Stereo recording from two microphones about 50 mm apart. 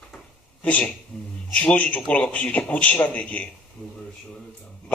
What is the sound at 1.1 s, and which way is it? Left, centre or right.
Speech, centre.